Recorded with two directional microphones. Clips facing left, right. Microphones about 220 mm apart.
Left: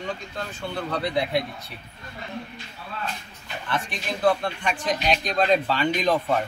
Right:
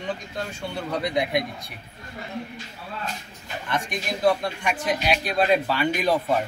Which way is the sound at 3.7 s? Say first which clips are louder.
Right 1 dB; 15° right (ahead or behind).